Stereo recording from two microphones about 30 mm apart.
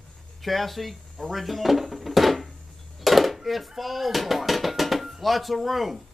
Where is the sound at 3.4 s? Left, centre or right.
Centre.